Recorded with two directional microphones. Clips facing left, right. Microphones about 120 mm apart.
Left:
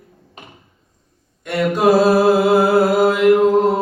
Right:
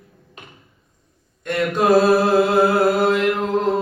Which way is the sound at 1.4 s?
10° left (ahead or behind).